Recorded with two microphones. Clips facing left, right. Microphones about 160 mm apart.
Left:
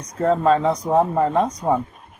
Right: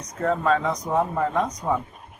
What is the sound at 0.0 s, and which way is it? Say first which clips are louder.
A man's voice: left 5 dB; 35° left (ahead or behind).